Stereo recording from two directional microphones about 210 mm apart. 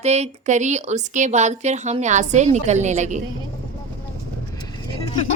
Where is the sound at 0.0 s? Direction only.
30° right (ahead or behind).